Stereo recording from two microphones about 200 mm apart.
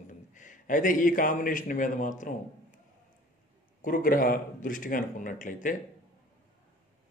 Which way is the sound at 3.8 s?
45° left (ahead or behind).